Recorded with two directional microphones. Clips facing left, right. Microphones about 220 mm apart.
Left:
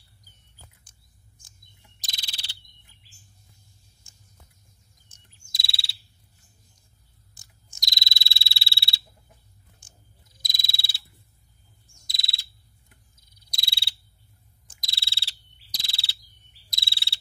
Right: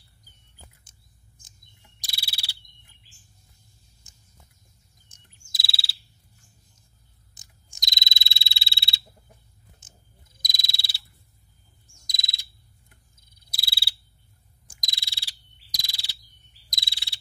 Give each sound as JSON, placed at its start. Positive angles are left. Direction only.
{"t": 2.0, "sound": "insect", "side_deg": -10}
{"t": 5.1, "sound": "bird vocalization", "side_deg": -15}
{"t": 5.5, "sound": "bird vocalization", "side_deg": -5}
{"t": 7.3, "sound": "frog", "side_deg": -20}
{"t": 9.8, "sound": "a sound", "side_deg": -20}
{"t": 10.4, "sound": "frog", "side_deg": -15}
{"t": 12.1, "sound": "bird vocalization", "side_deg": -15}
{"t": 13.5, "sound": "frog", "side_deg": -5}